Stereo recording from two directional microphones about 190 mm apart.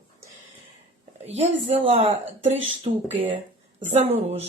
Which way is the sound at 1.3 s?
35° right (ahead or behind).